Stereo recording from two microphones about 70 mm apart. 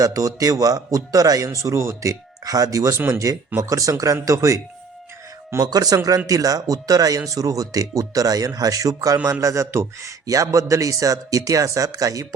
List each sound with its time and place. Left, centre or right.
0.0 s speech: right
1.5 s a man's voice: right
3.1 s a man's voice: right
5.6 s a man's voice: right